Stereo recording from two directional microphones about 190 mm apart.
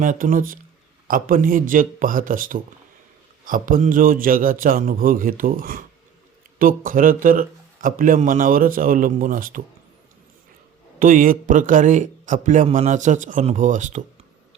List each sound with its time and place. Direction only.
0.0 s speech: 45° right (ahead or behind)
11.0 s a man's voice: 45° right (ahead or behind)